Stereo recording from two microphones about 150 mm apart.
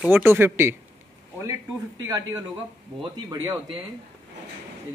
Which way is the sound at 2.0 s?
25° right (ahead or behind).